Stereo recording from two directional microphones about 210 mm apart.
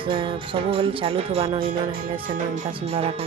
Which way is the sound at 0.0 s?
25° right (ahead or behind).